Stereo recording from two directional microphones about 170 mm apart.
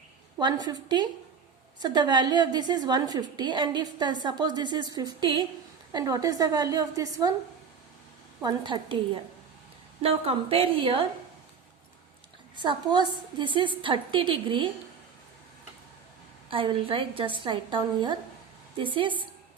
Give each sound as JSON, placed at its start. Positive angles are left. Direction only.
{"t": 0.3, "sound": "a woman's voice", "side_deg": -25}
{"t": 8.4, "sound": "a woman's voice", "side_deg": -25}
{"t": 10.0, "sound": "a woman's voice", "side_deg": -35}
{"t": 12.5, "sound": "a woman's voice", "side_deg": -25}
{"t": 16.5, "sound": "a woman's voice", "side_deg": -30}